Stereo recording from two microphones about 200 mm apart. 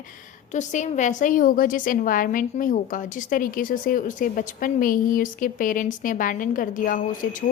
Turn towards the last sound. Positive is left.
turn(degrees=40)  # may be behind; listen again after turning